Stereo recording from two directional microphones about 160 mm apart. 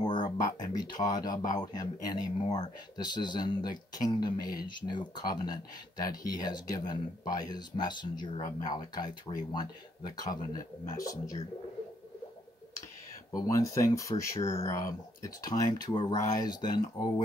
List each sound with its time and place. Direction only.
0.0 s speech: 30° left (ahead or behind)
13.3 s speech: 20° left (ahead or behind)